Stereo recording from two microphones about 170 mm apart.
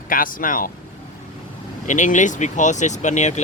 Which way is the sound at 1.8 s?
45° left (ahead or behind).